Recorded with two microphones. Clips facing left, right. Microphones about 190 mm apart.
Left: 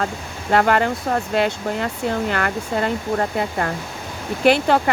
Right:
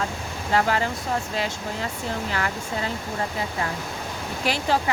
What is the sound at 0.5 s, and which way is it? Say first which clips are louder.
Speech: left 6 dB; 60° left (ahead or behind).